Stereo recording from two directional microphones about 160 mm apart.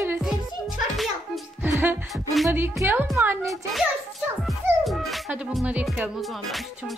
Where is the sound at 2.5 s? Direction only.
15° right (ahead or behind).